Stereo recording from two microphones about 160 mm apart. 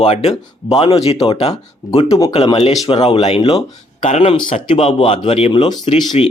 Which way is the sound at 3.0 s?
40° left (ahead or behind).